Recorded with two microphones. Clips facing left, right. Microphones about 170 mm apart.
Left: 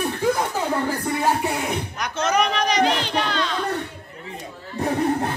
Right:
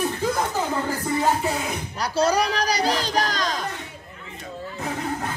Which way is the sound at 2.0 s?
35° right (ahead or behind).